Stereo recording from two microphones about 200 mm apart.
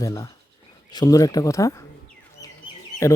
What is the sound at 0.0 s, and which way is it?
Speech, 15° left (ahead or behind).